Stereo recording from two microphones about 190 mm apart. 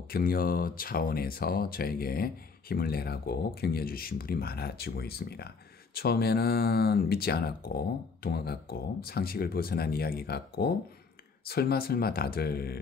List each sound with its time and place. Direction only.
0.1 s speech: 50° left (ahead or behind)